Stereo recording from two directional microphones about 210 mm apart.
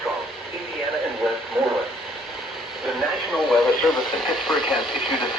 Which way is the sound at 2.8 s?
Centre (ahead or behind).